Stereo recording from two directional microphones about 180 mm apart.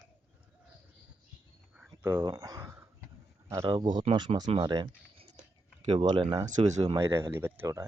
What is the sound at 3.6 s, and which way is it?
Speech, 25° right (ahead or behind).